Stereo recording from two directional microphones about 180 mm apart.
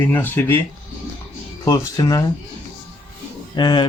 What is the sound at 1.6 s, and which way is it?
Speech, 20° left (ahead or behind).